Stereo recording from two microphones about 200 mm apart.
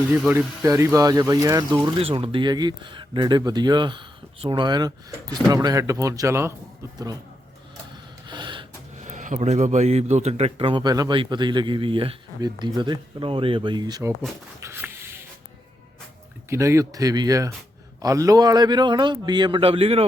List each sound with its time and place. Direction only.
0.1 s a man's voice: 5° right (ahead or behind)
8.3 s gasp: 25° right (ahead or behind)
9.0 s a man's voice: 40° right (ahead or behind); by 14.1 s 20° right (ahead or behind)
14.2 s a sound: 10° right (ahead or behind)
16.5 s a man's voice: 15° right (ahead or behind)